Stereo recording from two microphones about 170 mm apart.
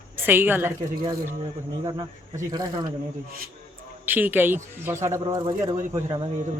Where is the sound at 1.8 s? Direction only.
25° right (ahead or behind).